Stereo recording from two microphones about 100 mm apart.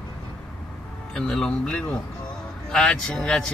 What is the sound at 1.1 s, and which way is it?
Speech, 5° left (ahead or behind).